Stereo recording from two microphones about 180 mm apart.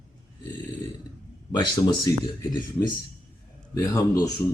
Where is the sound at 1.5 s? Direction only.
25° left (ahead or behind).